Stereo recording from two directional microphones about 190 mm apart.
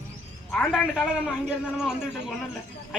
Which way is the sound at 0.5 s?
Centre (ahead or behind).